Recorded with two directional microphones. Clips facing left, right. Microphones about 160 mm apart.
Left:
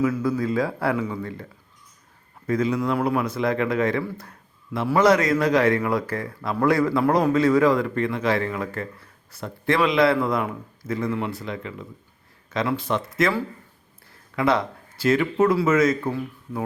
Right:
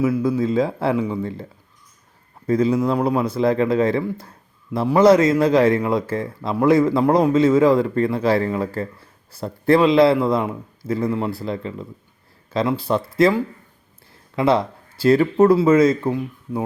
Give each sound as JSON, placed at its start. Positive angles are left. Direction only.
{"t": 0.2, "sound": "a man's voice", "side_deg": -20}
{"t": 2.5, "sound": "a man's voice", "side_deg": -30}